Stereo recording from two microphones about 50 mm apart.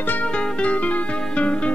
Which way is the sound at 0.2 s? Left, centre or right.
Left.